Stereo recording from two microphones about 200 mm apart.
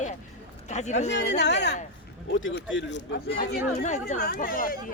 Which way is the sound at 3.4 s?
40° left (ahead or behind).